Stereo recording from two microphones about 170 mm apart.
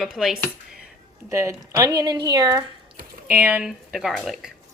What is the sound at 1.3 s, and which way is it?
Speech, 15° right (ahead or behind).